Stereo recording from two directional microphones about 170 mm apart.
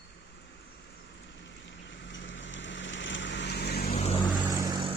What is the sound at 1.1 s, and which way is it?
Vehicle, 90° left.